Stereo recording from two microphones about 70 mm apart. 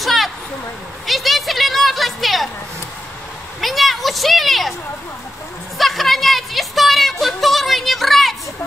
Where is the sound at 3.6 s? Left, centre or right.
Centre.